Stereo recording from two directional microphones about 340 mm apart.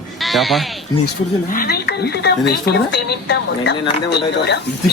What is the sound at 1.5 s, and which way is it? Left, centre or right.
Speech, left.